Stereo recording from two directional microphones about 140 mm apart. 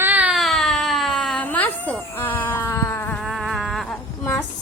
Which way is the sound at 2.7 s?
20° left (ahead or behind).